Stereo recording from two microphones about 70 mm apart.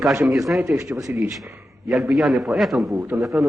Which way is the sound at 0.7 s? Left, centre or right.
Right.